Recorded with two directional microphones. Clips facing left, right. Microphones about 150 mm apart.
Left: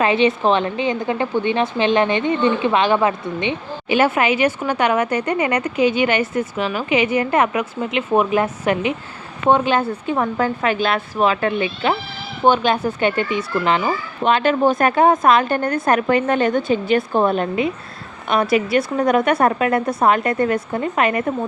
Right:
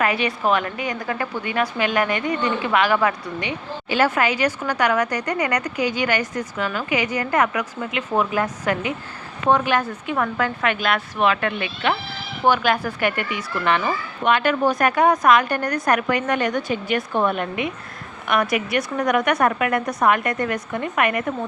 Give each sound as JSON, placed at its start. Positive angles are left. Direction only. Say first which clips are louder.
{"t": 0.0, "sound": "a woman's voice", "louder": "left 5 dB", "side_deg": 25}